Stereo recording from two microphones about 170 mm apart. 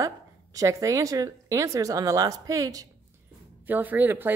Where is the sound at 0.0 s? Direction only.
20° right (ahead or behind).